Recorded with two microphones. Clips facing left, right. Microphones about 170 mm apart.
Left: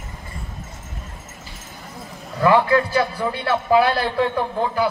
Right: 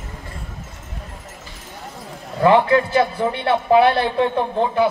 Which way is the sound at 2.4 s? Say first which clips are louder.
Right 2 dB; 25° right (ahead or behind).